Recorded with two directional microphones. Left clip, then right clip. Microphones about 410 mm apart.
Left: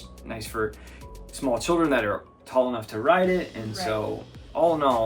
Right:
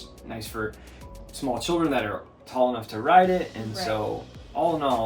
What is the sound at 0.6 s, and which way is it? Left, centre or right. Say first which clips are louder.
Speech: left 4 dB; centre.